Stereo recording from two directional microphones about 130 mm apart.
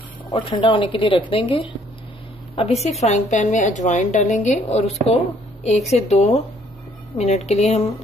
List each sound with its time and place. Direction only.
0.3 s speech: 40° left (ahead or behind)
2.5 s a woman's voice: 50° left (ahead or behind)
3.0 s a woman's voice: 65° left (ahead or behind)